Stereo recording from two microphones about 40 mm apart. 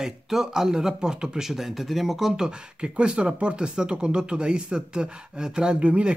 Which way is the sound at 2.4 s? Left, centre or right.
Right.